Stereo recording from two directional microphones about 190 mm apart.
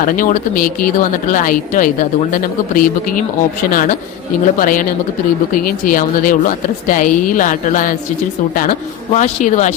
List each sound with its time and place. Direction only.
0.0 s speech: 45° left (ahead or behind)
9.1 s a man's voice: 40° left (ahead or behind)